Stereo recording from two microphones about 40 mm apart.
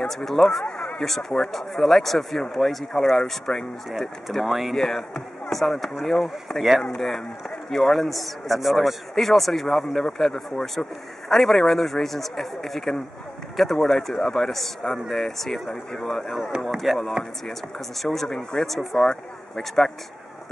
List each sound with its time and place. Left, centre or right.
0.1 s speech: centre
0.7 s speech: left
1.0 s a man's voice: centre
3.5 s speech: left
3.9 s a man's voice: centre
16.6 s speech: centre